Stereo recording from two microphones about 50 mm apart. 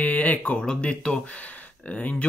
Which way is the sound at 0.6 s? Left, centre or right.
Centre.